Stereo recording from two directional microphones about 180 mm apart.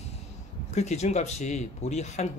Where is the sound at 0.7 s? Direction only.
40° left (ahead or behind).